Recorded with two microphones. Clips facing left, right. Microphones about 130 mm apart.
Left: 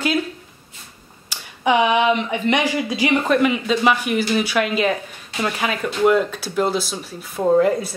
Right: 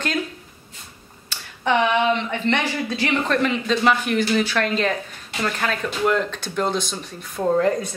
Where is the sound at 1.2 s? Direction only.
10° left (ahead or behind).